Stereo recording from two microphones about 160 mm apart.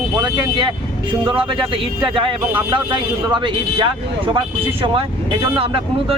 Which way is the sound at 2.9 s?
30° right (ahead or behind).